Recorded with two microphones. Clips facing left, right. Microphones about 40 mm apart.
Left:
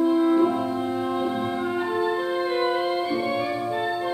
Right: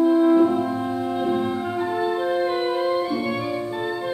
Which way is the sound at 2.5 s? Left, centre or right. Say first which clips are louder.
Right 1 dB; centre.